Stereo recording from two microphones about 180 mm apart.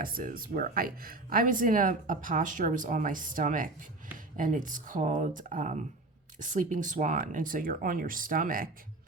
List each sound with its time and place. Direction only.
0.0 s speech: 50° right (ahead or behind)